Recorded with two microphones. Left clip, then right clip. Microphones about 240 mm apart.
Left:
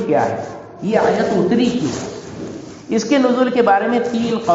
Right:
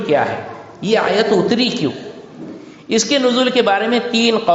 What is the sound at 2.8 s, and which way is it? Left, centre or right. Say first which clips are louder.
A man's voice: right 1 dB; right.